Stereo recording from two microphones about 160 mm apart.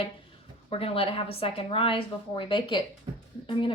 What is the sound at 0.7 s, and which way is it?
A woman's voice, 35° left (ahead or behind).